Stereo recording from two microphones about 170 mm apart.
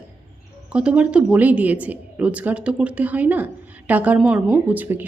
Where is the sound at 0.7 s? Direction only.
5° right (ahead or behind).